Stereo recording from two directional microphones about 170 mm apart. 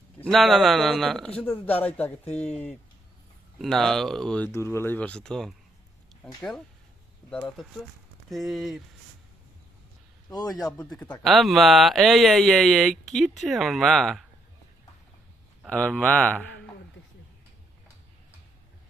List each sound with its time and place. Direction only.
0.2 s speech: centre (ahead or behind)
2.2 s speech: 40° left (ahead or behind)
3.6 s speech: 5° left (ahead or behind)
7.2 s speech: 25° left (ahead or behind)
8.3 s speech: centre (ahead or behind)
10.4 s speech: centre (ahead or behind)
15.6 s speech: 5° left (ahead or behind)